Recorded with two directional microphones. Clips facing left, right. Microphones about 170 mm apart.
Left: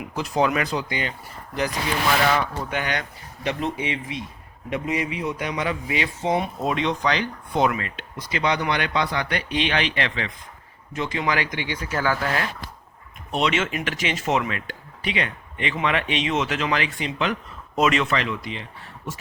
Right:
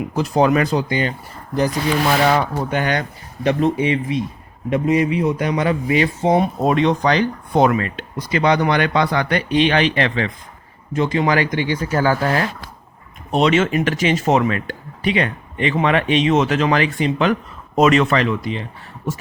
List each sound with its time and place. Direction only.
0.0 s speech: 35° right (ahead or behind)
2.3 s a man's voice: 45° right (ahead or behind)